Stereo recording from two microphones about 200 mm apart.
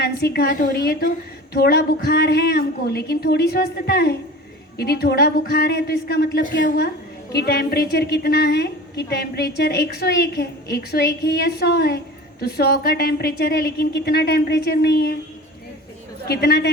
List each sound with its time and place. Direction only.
0.0 s a woman's voice: 55° left (ahead or behind)
16.3 s a woman's voice: 50° left (ahead or behind)